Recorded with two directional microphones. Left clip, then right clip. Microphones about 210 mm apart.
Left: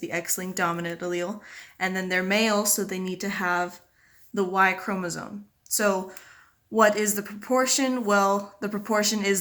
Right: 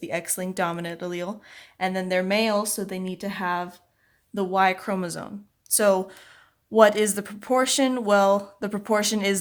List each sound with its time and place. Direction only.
0.0 s speech: 40° right (ahead or behind)